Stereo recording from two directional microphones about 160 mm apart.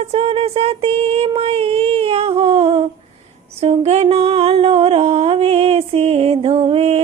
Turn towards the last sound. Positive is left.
turn(degrees=-40)  # may be behind; listen again after turning